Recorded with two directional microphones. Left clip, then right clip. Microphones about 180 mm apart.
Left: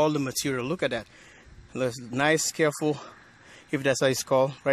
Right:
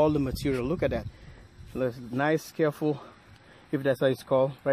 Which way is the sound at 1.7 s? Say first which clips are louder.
Left 1 dB; 20° left (ahead or behind).